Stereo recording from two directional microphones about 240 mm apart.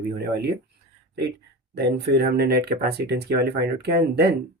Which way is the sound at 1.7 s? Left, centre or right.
Right.